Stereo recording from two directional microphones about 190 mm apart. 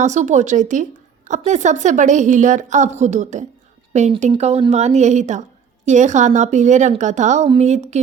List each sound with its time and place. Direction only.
0.0 s a woman's voice: 40° right (ahead or behind)